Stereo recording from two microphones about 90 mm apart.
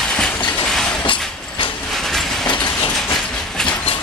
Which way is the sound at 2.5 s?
55° left (ahead or behind).